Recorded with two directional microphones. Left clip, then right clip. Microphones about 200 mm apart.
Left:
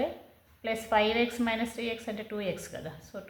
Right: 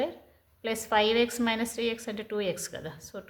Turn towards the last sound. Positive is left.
turn(degrees=-35)  # may be behind; listen again after turning